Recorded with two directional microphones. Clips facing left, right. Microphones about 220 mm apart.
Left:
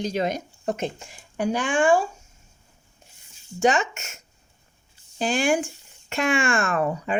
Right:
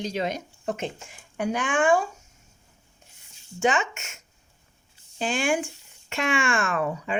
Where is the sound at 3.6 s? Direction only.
40° left (ahead or behind).